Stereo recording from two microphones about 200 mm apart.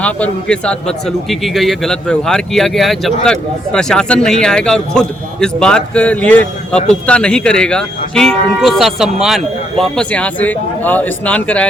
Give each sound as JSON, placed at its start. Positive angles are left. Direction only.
{"t": 0.0, "sound": "a man's voice", "side_deg": 5}